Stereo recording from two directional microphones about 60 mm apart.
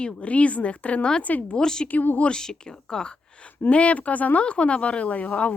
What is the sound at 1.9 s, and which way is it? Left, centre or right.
Speech, left.